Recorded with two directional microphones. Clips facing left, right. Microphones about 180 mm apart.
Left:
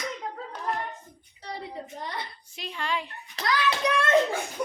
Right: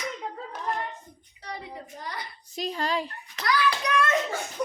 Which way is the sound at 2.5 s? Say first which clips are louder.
Right 4 dB; 40° right (ahead or behind).